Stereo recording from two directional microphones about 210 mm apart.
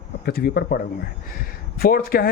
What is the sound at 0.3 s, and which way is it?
Speech, 50° left (ahead or behind).